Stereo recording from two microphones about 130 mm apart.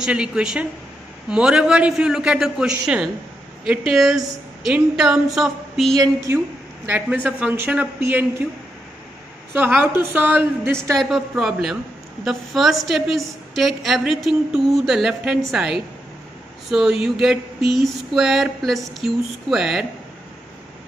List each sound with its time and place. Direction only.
0.0 s a woman's voice: 5° right (ahead or behind)
5.9 s a woman's voice: 25° right (ahead or behind)
6.9 s a woman's voice: 10° right (ahead or behind)
9.5 s a woman's voice: 15° right (ahead or behind)
11.0 s a woman's voice: centre (ahead or behind)